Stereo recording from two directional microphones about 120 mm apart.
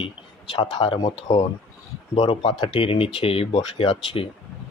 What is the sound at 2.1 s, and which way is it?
Speech, 45° left (ahead or behind).